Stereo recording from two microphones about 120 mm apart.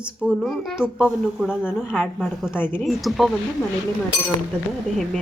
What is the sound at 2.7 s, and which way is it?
Speech, centre (ahead or behind).